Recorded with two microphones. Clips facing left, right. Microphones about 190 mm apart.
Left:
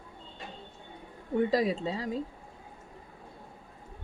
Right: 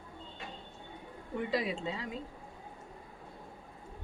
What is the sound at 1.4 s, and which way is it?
Speech, 40° left (ahead or behind).